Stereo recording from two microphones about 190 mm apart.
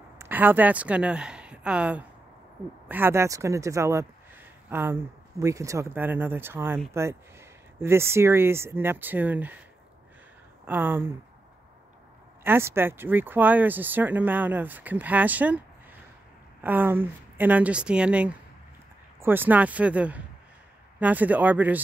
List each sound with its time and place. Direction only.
0.2 s speech: 10° right (ahead or behind)
10.7 s speech: 10° right (ahead or behind)
12.4 s speech: 10° right (ahead or behind)
16.6 s speech: 10° right (ahead or behind)